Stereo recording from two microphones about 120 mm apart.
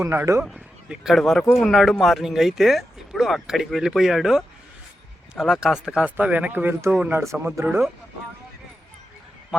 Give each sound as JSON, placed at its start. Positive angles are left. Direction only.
{"t": 0.0, "sound": "speech", "side_deg": -20}
{"t": 0.9, "sound": "speech", "side_deg": 0}